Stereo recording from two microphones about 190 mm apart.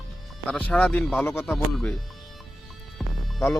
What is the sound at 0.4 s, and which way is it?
Speech, 5° left (ahead or behind).